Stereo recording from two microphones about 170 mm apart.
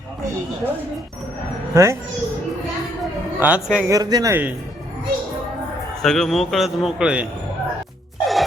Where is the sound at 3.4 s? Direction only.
5° right (ahead or behind).